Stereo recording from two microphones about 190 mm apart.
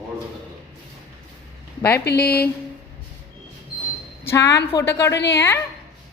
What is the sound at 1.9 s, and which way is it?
Speech, 60° left (ahead or behind).